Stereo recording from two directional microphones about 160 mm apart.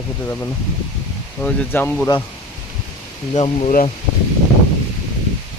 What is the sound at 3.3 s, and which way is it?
Speech, 40° left (ahead or behind).